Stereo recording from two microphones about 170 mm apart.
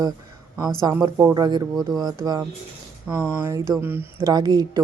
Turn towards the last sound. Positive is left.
turn(degrees=-25)  # may be behind; listen again after turning